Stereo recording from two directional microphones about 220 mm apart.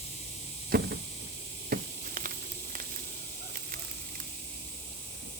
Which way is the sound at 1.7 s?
40° right (ahead or behind).